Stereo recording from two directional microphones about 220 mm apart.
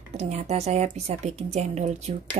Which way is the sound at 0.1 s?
30° right (ahead or behind).